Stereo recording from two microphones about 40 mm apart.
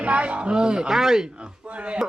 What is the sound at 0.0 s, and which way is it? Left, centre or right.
Speech, right.